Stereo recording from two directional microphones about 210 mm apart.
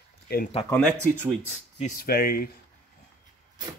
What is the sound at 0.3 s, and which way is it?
Speech, 50° left (ahead or behind).